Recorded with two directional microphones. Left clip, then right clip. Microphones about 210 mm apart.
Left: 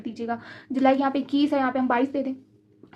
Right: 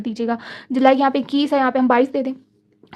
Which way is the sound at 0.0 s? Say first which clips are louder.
Right 7 dB; 45° right (ahead or behind).